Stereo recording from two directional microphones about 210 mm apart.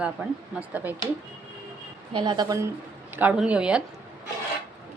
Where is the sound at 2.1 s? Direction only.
20° right (ahead or behind).